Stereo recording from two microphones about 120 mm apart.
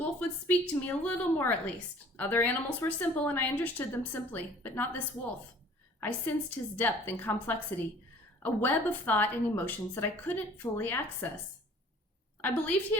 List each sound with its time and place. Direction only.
0.2 s speech: 15° left (ahead or behind)
6.0 s a woman's voice: 15° left (ahead or behind)
12.4 s speech: 15° left (ahead or behind)